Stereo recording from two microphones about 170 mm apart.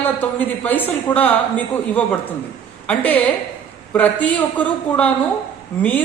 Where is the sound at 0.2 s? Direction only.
10° left (ahead or behind).